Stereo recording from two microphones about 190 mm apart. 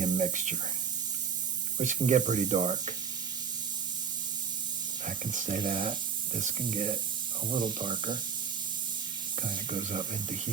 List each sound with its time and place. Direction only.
0.0 s spray: 40° right (ahead or behind)
1.8 s speech: 40° right (ahead or behind)
5.0 s speech: 40° right (ahead or behind)
7.8 s speech: 25° right (ahead or behind)
9.5 s speech: 40° right (ahead or behind)